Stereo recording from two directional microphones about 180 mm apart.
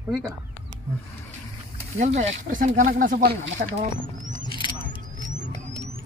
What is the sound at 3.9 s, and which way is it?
Rodents, 45° right (ahead or behind).